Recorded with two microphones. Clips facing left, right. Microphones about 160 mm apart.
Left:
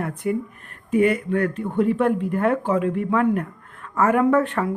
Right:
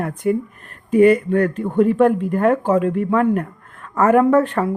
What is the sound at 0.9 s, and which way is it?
Speech, 35° right (ahead or behind).